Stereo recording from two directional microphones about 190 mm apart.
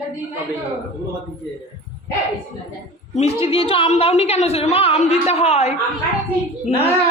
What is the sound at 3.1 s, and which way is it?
A woman's voice, 30° left (ahead or behind).